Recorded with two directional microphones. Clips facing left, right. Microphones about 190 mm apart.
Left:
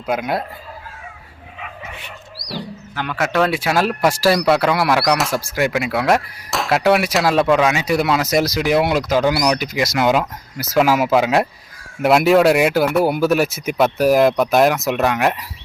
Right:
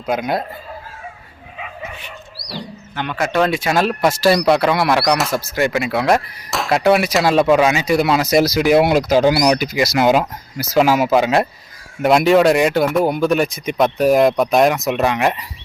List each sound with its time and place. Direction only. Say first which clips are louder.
0.0 s speech: right 1 dB; 5° left (ahead or behind)
2.9 s speech: right 1 dB; 5° left (ahead or behind)
8.9 s speech: right 3 dB; 40° right (ahead or behind)
9.4 s speech: right 3 dB; 10° right (ahead or behind)